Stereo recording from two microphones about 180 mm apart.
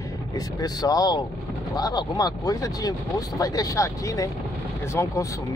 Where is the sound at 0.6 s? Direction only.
20° left (ahead or behind).